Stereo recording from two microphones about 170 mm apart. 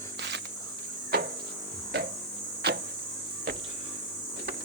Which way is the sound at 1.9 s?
75° right (ahead or behind).